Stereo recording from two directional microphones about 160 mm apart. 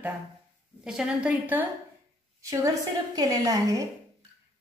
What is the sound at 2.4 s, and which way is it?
A woman's voice, 20° right (ahead or behind).